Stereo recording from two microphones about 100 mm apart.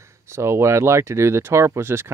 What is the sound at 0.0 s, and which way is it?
Speech, 25° right (ahead or behind).